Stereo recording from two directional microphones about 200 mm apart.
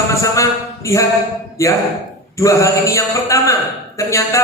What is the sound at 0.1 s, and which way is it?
Speech, 15° left (ahead or behind).